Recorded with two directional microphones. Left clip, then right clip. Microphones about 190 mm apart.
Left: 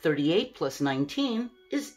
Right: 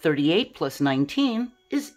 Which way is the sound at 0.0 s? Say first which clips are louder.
Right 4 dB; 45° right (ahead or behind).